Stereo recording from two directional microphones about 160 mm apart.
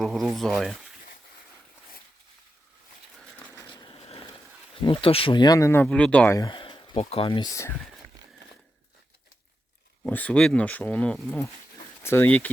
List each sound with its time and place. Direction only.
0.0 s speech: centre (ahead or behind)
3.7 s a sound: 30° left (ahead or behind)
4.8 s speech: 35° left (ahead or behind); by 6.3 s 5° left (ahead or behind)
6.3 s a sound: 25° left (ahead or behind)
7.0 s speech: 35° left (ahead or behind); by 7.7 s 20° left (ahead or behind)
10.0 s speech: 10° left (ahead or behind)